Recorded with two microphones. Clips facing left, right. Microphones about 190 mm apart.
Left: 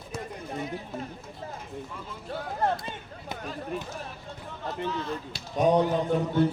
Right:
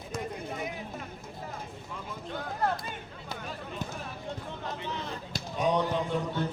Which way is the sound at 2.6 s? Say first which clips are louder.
Left 3 dB; 25° left (ahead or behind).